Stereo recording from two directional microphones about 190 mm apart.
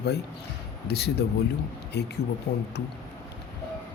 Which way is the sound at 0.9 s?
60° left (ahead or behind).